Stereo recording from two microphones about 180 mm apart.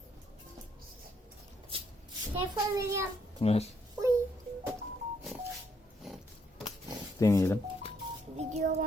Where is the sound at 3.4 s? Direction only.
35° left (ahead or behind).